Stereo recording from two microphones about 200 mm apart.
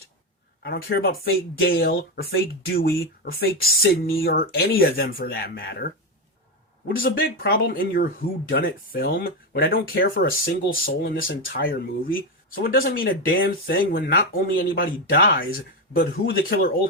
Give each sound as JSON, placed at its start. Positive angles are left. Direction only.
{"t": 0.6, "sound": "speech", "side_deg": 50}